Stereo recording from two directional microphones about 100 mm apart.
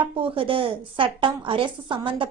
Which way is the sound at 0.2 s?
65° right (ahead or behind).